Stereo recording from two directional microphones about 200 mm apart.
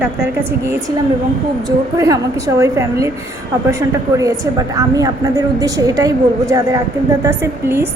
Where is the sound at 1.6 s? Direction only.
15° right (ahead or behind).